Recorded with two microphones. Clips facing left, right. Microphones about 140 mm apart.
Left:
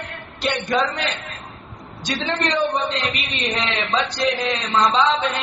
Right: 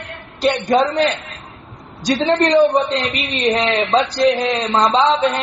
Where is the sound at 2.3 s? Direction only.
35° right (ahead or behind).